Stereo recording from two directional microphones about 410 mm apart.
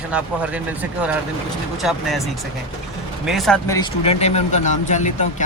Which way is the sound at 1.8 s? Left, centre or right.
Centre.